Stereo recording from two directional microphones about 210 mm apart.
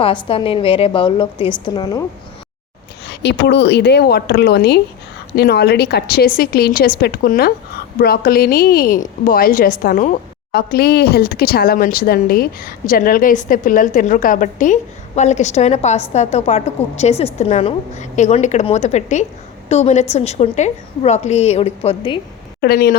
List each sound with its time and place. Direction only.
0.0 s a woman's voice: 25° left (ahead or behind)
3.1 s a woman's voice: 55° left (ahead or behind); by 22.2 s 25° left (ahead or behind)
22.6 s a woman's voice: 45° left (ahead or behind)